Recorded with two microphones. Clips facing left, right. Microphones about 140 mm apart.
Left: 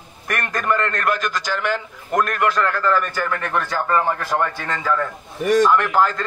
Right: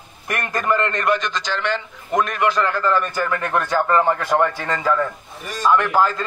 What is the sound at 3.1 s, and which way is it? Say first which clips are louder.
A man's voice: right 2 dB; 15° right (ahead or behind).